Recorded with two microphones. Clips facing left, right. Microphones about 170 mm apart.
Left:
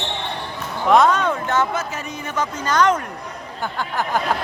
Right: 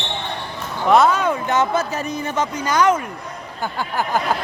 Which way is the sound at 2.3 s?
20° right (ahead or behind).